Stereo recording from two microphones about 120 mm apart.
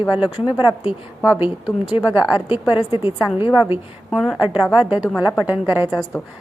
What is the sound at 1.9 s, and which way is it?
A woman's voice, 50° left (ahead or behind).